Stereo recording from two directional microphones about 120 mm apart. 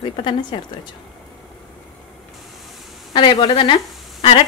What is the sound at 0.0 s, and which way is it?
Speech, 40° left (ahead or behind).